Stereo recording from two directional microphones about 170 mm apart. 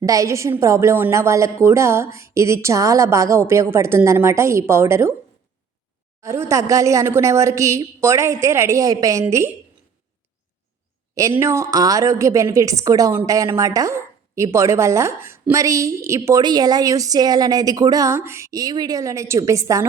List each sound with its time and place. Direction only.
0.0 s a woman's voice: 20° right (ahead or behind)
6.2 s a woman's voice: 15° right (ahead or behind)
11.1 s a woman's voice: 20° right (ahead or behind)